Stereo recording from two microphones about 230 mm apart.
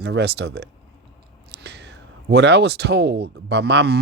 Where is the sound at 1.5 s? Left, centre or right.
Right.